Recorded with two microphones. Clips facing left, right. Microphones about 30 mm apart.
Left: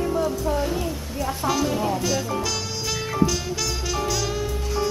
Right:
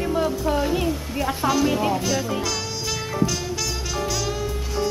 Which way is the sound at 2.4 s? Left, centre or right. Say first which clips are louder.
Right 1 dB; centre.